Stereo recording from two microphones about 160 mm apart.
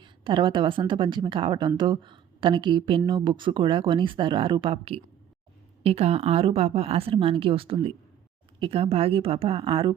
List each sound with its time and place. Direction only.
0.0 s a woman's voice: 30° right (ahead or behind)